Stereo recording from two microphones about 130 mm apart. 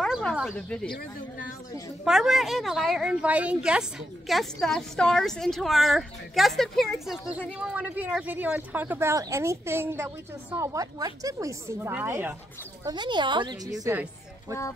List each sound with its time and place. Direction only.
0.0 s a sound: 5° left (ahead or behind)
2.0 s a woman's voice: 5° right (ahead or behind)
4.3 s a woman's voice: centre (ahead or behind)
7.5 s speech: 10° right (ahead or behind)
12.8 s a woman's voice: 35° right (ahead or behind)